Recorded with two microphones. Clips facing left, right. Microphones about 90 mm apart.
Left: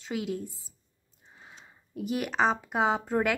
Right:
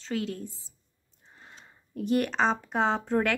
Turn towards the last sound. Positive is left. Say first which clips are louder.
# even
turn(degrees=5)  # may be behind; listen again after turning